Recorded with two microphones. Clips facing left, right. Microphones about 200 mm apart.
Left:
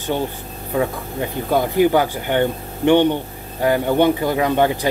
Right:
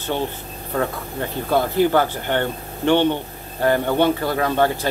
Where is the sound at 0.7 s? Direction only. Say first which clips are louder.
Left 3 dB; 15° left (ahead or behind).